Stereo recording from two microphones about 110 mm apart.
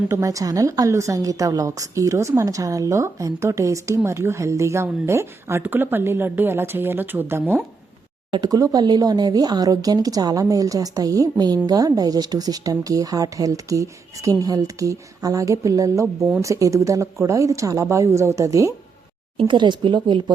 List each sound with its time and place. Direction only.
0.1 s a woman's voice: 30° right (ahead or behind)
8.3 s a woman's voice: 35° right (ahead or behind)
19.5 s speech: 45° right (ahead or behind)